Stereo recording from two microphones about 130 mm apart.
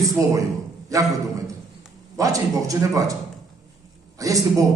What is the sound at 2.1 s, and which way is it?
Speech, 25° right (ahead or behind).